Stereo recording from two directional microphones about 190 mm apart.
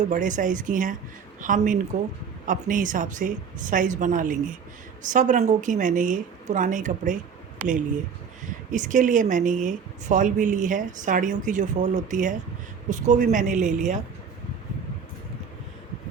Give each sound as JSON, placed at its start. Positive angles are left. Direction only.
{"t": 0.1, "sound": "a woman's voice", "side_deg": -40}
{"t": 8.7, "sound": "a woman's voice", "side_deg": -40}